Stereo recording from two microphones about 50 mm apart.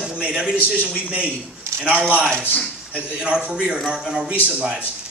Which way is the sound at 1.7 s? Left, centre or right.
Right.